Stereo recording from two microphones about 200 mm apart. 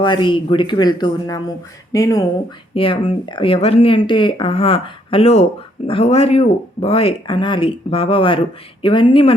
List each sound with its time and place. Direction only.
0.0 s speech: 25° left (ahead or behind)